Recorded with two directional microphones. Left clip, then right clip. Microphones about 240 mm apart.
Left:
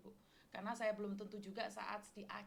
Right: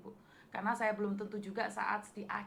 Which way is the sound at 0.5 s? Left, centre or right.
Left.